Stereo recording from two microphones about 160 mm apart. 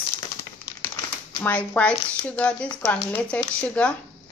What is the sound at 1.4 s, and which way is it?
Speech, 10° left (ahead or behind).